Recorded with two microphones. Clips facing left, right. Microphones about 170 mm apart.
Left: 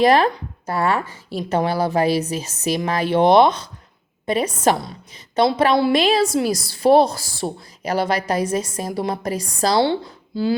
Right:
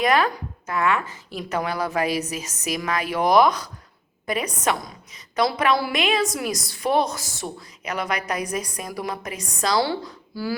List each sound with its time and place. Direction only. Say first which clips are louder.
0.0 s a woman's voice: left 5 dB; 30° left (ahead or behind)